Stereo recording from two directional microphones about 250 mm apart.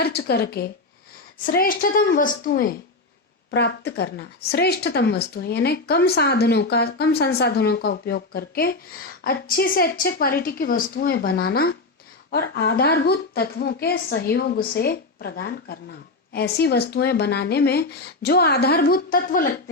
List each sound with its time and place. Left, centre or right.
0.0 s a woman's voice: left